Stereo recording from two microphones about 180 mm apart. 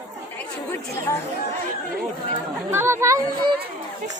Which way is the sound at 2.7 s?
15° right (ahead or behind).